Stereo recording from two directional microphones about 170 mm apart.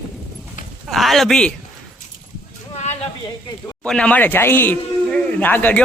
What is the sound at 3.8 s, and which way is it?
Speech, 5° left (ahead or behind).